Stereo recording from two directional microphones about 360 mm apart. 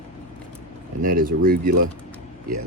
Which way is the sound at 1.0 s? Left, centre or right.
Right.